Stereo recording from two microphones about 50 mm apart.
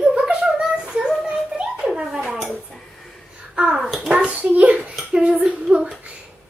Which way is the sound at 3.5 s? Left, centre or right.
Centre.